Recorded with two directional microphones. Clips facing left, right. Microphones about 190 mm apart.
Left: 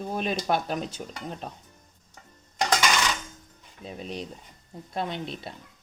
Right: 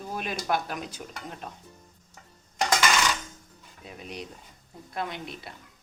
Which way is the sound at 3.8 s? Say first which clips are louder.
Left 4 dB; 30° left (ahead or behind).